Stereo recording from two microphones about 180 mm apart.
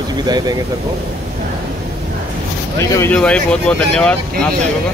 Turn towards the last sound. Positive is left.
turn(degrees=5)  # may be behind; listen again after turning